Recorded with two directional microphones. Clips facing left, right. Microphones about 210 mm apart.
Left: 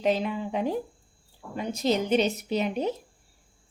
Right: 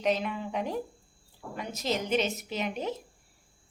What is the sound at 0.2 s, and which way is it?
Speech, 30° left (ahead or behind).